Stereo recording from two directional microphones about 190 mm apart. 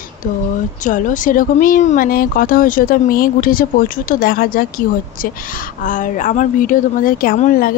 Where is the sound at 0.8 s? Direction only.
40° left (ahead or behind).